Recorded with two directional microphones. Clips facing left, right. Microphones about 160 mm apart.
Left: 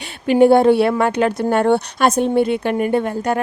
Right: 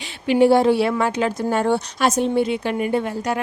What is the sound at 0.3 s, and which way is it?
A woman's voice, 50° left (ahead or behind).